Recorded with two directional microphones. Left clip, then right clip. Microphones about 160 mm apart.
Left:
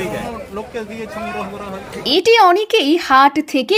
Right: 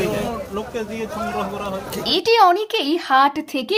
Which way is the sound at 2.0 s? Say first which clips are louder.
Left 4 dB; 20° left (ahead or behind).